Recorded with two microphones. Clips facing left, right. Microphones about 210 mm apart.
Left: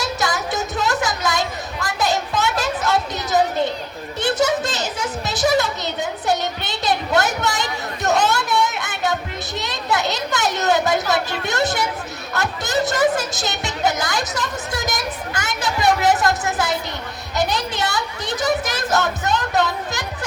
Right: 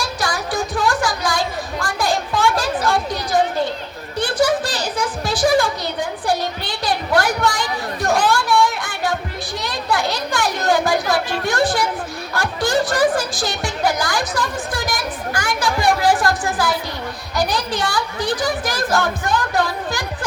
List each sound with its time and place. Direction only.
0.0 s music: 20° left (ahead or behind)
4.2 s a sound: 25° left (ahead or behind)
9.6 s children playing: 20° left (ahead or behind)
11.1 s a sound: 20° left (ahead or behind)
12.3 s music: 20° left (ahead or behind)
17.3 s a woman's voice: 25° left (ahead or behind)